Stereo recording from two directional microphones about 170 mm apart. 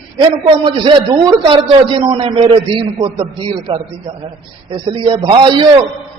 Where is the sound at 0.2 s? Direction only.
30° right (ahead or behind).